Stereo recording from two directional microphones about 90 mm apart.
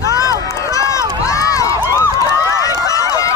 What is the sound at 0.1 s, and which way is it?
Run, 40° left (ahead or behind).